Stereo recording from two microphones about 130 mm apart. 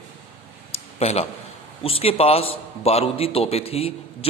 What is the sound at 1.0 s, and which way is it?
A man's voice, 55° left (ahead or behind).